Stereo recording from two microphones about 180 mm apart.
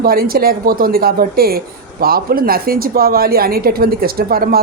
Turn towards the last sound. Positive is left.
turn(degrees=-55)  # may be behind; listen again after turning